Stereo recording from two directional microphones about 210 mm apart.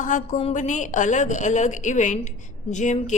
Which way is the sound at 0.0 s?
35° left (ahead or behind).